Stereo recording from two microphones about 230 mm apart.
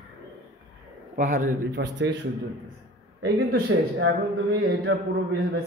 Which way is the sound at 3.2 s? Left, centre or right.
Right.